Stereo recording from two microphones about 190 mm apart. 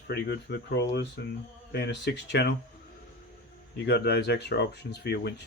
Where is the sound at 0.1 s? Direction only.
60° left (ahead or behind).